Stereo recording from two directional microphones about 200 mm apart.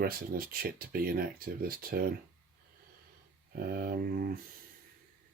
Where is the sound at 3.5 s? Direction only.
50° right (ahead or behind).